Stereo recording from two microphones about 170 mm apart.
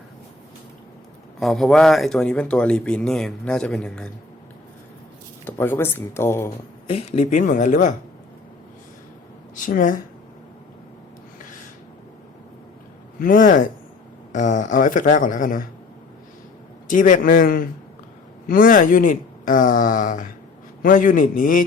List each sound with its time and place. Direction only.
1.4 s speech: centre (ahead or behind)
5.5 s speech: 10° left (ahead or behind)
6.8 s speech: 35° left (ahead or behind)
7.3 s speech: 50° left (ahead or behind)
9.6 s speech: 50° left (ahead or behind)
13.1 s speech: 55° left (ahead or behind)
16.9 s a man's voice: 50° left (ahead or behind)